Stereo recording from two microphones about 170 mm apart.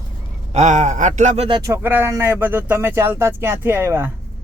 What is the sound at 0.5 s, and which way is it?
Speech, 45° right (ahead or behind).